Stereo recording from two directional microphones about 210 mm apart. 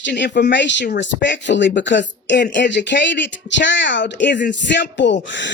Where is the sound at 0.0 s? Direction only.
55° left (ahead or behind).